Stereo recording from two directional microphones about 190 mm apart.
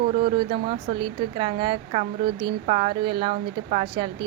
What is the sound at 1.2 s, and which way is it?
Speech, 25° right (ahead or behind).